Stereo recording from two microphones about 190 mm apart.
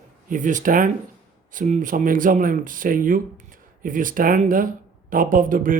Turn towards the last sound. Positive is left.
turn(degrees=-45)  # may be behind; listen again after turning